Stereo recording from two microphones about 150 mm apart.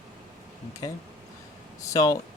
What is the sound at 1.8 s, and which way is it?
Speech, 20° left (ahead or behind).